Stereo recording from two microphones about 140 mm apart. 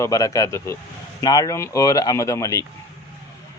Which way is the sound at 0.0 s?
25° left (ahead or behind).